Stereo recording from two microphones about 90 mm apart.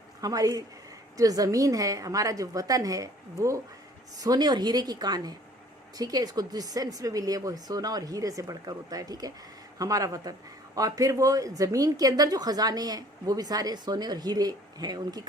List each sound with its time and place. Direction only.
0.2 s a woman's voice: 45° right (ahead or behind)
4.2 s a woman's voice: 50° right (ahead or behind)